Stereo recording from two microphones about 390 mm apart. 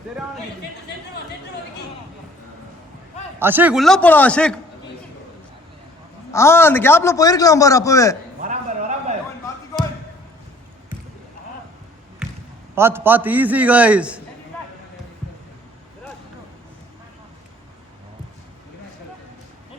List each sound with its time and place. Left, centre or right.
3.3 s a man's voice: centre
6.3 s a man's voice: centre
8.4 s a sound: centre
12.7 s a man's voice: centre